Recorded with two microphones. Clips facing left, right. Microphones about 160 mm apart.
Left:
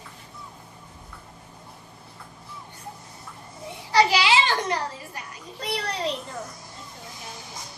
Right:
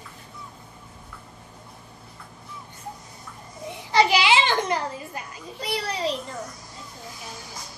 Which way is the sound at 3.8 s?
20° right (ahead or behind).